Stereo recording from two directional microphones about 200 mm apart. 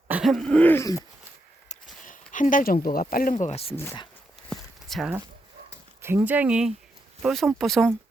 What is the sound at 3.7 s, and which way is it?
Speech, 10° left (ahead or behind).